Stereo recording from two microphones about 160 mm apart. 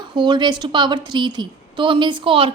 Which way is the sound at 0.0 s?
30° right (ahead or behind).